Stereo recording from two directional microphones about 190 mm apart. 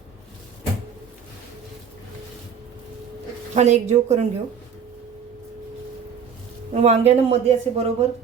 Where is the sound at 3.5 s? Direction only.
35° right (ahead or behind).